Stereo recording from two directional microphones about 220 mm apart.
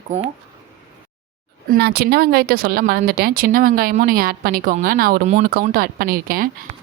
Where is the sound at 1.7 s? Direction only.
45° right (ahead or behind).